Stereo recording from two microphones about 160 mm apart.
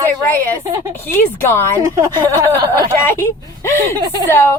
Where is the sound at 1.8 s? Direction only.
20° right (ahead or behind).